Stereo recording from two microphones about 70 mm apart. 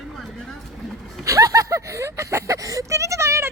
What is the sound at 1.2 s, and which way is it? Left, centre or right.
Speech, right.